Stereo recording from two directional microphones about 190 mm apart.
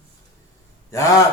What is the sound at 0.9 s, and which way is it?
Speech, 15° left (ahead or behind).